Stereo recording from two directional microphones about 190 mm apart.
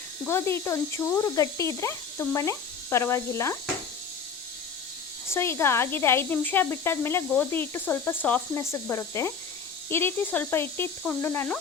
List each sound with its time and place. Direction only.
0.3 s speech: 15° left (ahead or behind)
5.3 s speech: 15° left (ahead or behind)